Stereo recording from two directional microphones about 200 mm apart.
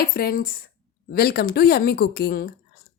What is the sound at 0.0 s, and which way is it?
Speech, 45° left (ahead or behind).